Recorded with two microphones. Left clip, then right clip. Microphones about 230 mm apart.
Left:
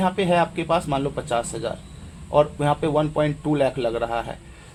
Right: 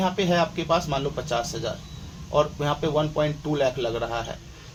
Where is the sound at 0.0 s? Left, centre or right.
Left.